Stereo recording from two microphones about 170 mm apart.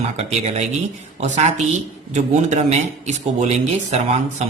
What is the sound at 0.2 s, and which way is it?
Speech, 40° right (ahead or behind).